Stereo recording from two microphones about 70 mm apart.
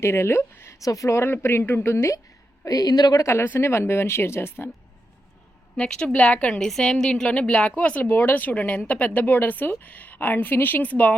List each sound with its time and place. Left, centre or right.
0.0 s speech: left
0.8 s speech: left
1.1 s a woman's voice: left
2.6 s a woman's voice: left
3.2 s a woman's voice: left
5.7 s a woman's voice: centre
6.6 s a woman's voice: centre; by 11.1 s left